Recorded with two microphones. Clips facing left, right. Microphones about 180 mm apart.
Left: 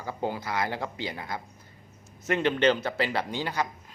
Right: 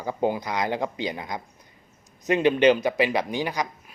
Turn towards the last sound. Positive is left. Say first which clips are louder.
# right 3 dB
turn(degrees=-15)  # may be behind; listen again after turning